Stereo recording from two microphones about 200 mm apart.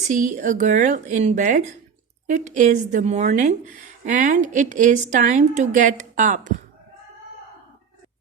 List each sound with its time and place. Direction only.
0.1 s a woman's voice: 40° right (ahead or behind)